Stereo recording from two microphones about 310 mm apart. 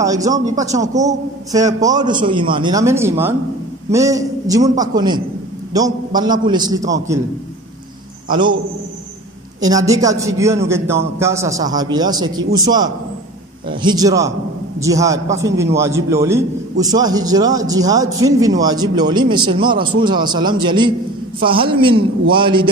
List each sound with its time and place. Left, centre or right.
0.0 s a man's voice: centre
9.6 s a man's voice: centre